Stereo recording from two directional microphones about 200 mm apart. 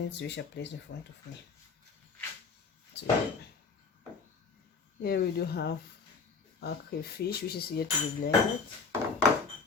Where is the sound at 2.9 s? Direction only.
55° left (ahead or behind).